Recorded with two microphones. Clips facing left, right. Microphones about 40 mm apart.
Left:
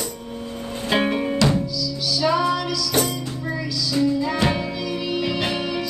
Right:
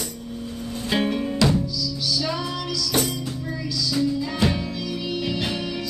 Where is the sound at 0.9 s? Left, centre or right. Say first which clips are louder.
Left 3 dB; left.